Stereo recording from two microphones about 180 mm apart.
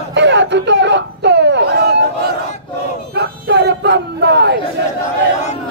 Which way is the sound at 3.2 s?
70° right (ahead or behind).